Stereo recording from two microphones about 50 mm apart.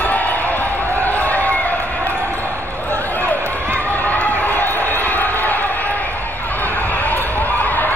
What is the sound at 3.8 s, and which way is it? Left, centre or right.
Run, left.